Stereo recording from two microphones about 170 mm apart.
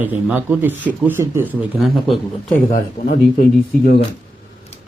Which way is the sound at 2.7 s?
45° left (ahead or behind).